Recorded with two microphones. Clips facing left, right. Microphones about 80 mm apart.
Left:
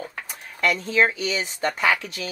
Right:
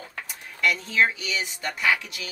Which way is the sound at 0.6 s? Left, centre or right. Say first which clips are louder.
Left 2 dB; left.